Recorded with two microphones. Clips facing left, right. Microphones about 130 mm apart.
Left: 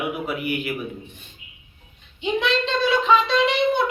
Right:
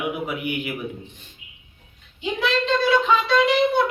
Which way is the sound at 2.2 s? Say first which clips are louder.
Left 2 dB; 5° right (ahead or behind).